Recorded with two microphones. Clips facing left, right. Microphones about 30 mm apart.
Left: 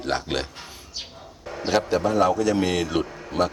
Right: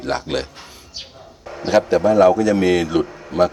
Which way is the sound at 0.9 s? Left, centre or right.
Centre.